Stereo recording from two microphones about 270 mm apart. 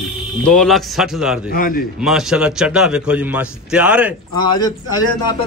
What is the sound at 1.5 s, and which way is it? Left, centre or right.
Speech, left.